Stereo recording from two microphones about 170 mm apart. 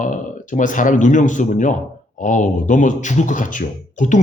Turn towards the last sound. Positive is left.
turn(degrees=45)  # may be behind; listen again after turning